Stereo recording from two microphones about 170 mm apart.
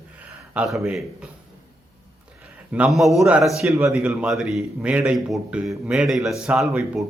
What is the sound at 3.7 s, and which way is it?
Speech, 15° right (ahead or behind).